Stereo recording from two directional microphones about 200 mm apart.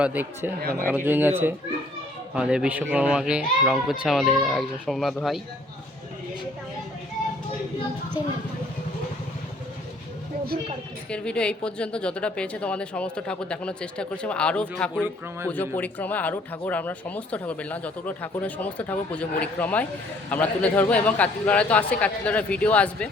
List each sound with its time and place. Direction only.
0.0 s speech: 10° right (ahead or behind)
0.6 s speech: 50° right (ahead or behind)
0.9 s a woman's voice: 10° right (ahead or behind)
11.1 s a woman's voice: 5° left (ahead or behind)